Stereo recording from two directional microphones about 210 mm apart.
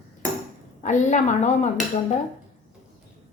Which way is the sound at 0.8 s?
35° left (ahead or behind).